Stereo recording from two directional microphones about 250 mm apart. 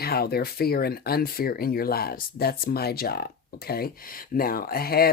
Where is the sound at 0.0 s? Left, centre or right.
Left.